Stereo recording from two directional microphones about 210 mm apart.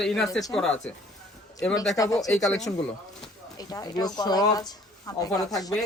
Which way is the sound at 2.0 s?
15° left (ahead or behind).